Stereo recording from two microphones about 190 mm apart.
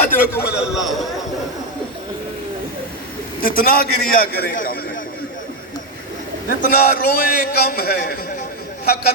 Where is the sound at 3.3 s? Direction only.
50° left (ahead or behind).